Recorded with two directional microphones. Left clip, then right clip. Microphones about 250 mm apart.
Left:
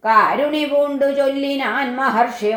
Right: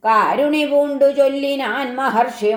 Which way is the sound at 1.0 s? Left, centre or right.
Right.